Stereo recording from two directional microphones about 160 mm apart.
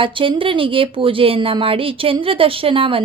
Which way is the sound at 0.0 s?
35° right (ahead or behind).